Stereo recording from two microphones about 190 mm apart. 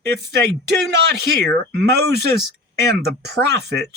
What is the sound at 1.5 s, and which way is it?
Speech, 60° right (ahead or behind).